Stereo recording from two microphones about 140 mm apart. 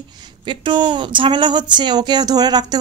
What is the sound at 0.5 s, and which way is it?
A woman's voice, 35° right (ahead or behind).